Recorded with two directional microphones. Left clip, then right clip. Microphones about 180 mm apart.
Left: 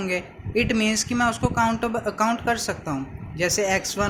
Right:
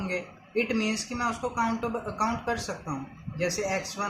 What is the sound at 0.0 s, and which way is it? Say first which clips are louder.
Speech: left 6 dB; 50° left (ahead or behind).